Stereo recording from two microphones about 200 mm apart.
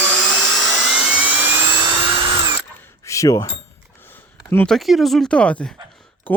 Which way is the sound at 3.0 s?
15° left (ahead or behind).